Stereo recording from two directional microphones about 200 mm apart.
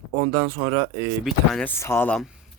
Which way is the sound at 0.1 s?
20° right (ahead or behind).